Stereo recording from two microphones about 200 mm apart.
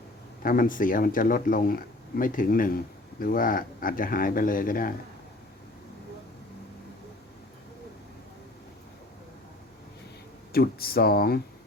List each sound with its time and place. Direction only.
0.4 s speech: 45° left (ahead or behind)
10.5 s speech: 50° left (ahead or behind)